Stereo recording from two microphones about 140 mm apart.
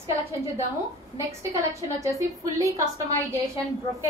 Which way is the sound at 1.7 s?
25° right (ahead or behind).